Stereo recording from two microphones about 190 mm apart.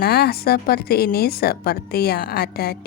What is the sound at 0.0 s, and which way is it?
A woman's voice, 55° left (ahead or behind).